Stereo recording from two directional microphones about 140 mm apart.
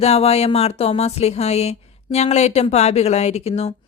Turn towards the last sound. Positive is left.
turn(degrees=45)  # may be behind; listen again after turning